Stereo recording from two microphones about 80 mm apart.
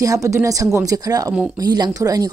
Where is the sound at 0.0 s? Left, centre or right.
Right.